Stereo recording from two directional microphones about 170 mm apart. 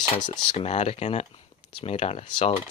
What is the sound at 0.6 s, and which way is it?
Cutlery, 40° left (ahead or behind).